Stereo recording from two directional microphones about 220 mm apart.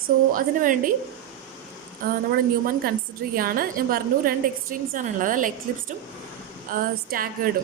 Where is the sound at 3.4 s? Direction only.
40° right (ahead or behind).